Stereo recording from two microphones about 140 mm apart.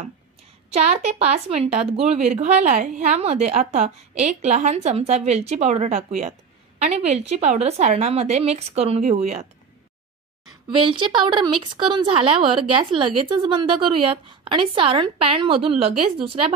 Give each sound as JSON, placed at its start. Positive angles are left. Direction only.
{"t": 0.7, "sound": "speech", "side_deg": -50}
{"t": 10.7, "sound": "a woman's voice", "side_deg": -35}